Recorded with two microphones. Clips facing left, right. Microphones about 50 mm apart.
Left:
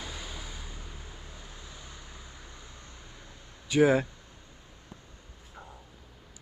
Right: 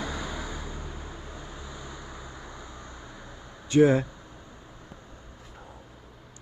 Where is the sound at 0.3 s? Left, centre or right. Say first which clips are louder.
Right 7 dB; right.